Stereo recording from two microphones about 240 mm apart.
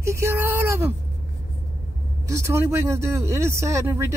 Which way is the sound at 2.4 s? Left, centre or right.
Centre.